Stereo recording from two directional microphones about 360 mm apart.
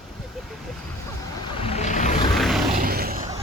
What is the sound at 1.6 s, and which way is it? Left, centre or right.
Vehicle, centre.